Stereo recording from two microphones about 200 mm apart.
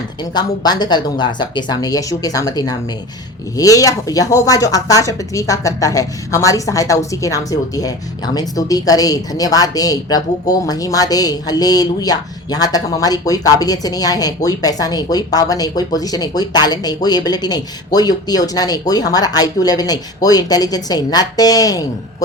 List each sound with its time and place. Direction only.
0.3 s speech: 20° left (ahead or behind)